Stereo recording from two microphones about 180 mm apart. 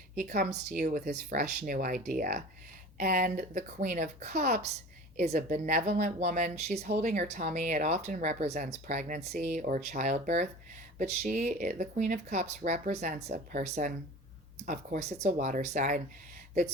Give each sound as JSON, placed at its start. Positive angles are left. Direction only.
{"t": 0.3, "sound": "speech", "side_deg": -55}